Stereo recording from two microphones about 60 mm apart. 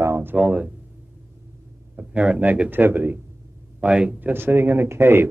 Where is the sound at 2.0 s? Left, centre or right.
Centre.